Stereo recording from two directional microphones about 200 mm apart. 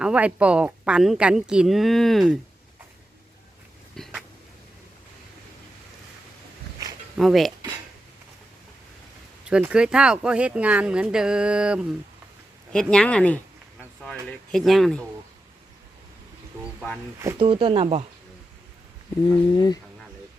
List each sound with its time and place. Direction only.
0.0 s a woman's voice: 5° right (ahead or behind)
3.9 s a sound: centre (ahead or behind)
7.2 s a woman's voice: centre (ahead or behind)
9.5 s a woman's voice: 5° right (ahead or behind)
17.2 s speech: 15° right (ahead or behind)
17.4 s speech: 25° right (ahead or behind)
19.5 s speech: 20° left (ahead or behind)